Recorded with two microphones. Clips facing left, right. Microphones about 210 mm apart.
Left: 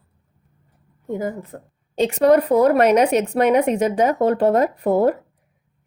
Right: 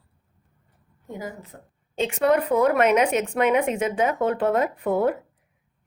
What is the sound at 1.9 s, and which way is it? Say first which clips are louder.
Speech: left 6 dB; 40° left (ahead or behind).